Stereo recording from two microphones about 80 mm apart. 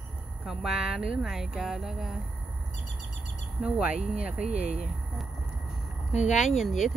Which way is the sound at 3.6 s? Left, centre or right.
Centre.